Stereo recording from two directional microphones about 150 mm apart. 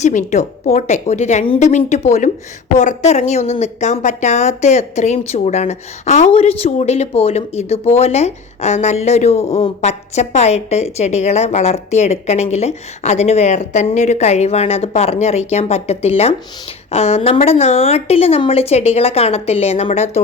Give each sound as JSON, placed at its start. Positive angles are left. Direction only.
{"t": 0.0, "sound": "a woman's voice", "side_deg": 55}